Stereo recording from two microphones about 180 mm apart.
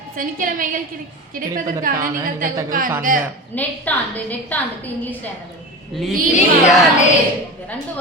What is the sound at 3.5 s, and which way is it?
A woman's voice, 10° left (ahead or behind).